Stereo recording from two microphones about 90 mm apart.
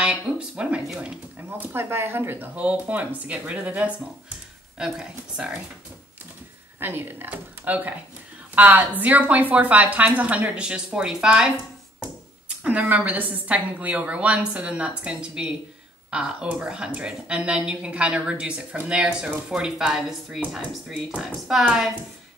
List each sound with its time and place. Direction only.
0.0 s a woman's voice: 10° right (ahead or behind)
1.6 s a woman's voice: 25° right (ahead or behind); by 5.6 s 10° right (ahead or behind)
6.8 s a woman's voice: 25° right (ahead or behind); by 21.9 s 5° right (ahead or behind)